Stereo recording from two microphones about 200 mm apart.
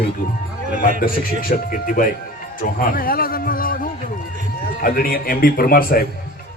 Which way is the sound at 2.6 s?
45° left (ahead or behind).